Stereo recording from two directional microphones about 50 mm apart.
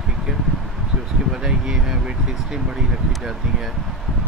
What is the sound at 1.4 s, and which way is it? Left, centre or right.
Speech, centre.